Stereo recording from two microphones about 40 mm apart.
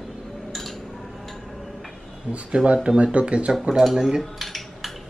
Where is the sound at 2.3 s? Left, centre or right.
Right.